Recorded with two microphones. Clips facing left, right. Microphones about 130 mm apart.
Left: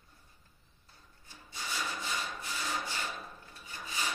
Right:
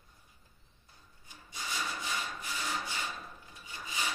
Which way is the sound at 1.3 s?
15° right (ahead or behind).